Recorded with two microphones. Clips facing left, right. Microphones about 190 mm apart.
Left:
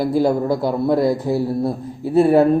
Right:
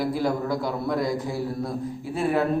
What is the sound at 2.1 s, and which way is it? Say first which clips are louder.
Speech: left 11 dB; 35° left (ahead or behind).